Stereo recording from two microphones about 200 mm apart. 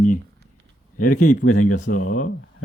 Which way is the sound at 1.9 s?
40° left (ahead or behind).